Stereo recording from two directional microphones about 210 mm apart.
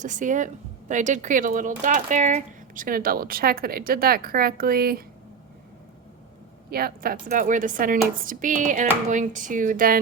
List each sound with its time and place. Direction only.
0.0 s speech: 35° right (ahead or behind)
6.7 s a woman's voice: 45° right (ahead or behind)